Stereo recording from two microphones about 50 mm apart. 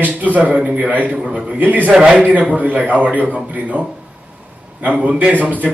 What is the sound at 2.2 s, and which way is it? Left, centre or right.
A man's voice, right.